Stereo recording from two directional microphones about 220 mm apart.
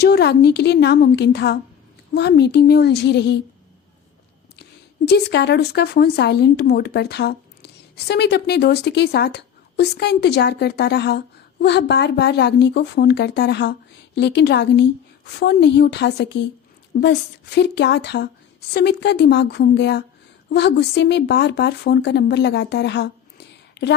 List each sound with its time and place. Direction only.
0.0 s speech: 50° left (ahead or behind)
5.0 s speech: 50° left (ahead or behind)